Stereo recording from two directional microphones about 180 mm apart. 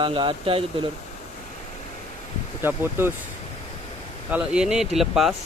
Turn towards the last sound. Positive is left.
turn(degrees=0)  # may be behind; listen again after turning